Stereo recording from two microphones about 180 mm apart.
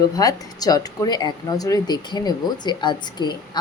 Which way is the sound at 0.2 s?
20° left (ahead or behind).